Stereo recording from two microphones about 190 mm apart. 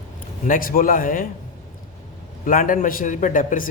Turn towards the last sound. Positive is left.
turn(degrees=45)  # may be behind; listen again after turning